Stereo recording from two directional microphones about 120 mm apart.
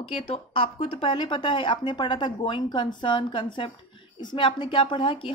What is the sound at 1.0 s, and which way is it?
A woman's voice, 45° left (ahead or behind).